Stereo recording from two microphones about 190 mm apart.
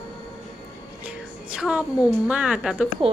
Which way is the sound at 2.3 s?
5° right (ahead or behind).